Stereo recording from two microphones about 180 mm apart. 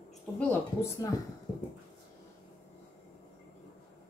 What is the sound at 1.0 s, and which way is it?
Speech, 15° left (ahead or behind).